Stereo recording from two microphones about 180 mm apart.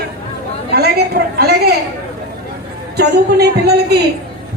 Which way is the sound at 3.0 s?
65° right (ahead or behind).